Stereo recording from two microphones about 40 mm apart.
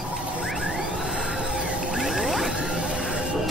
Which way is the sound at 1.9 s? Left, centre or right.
Centre.